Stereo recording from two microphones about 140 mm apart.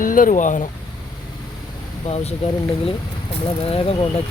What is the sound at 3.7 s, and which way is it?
Speech, 45° left (ahead or behind).